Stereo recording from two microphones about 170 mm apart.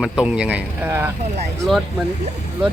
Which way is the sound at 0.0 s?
5° right (ahead or behind).